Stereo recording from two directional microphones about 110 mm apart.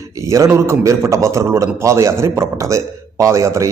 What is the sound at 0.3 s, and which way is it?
A man's voice, 25° right (ahead or behind).